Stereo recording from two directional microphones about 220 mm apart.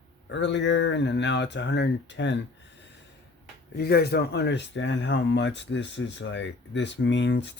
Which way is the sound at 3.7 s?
45° left (ahead or behind).